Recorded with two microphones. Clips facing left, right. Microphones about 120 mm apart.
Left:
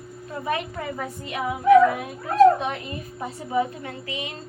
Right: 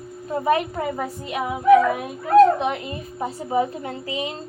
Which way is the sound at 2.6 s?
25° right (ahead or behind).